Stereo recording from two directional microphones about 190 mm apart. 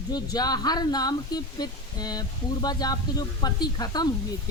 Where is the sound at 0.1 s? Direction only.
20° left (ahead or behind).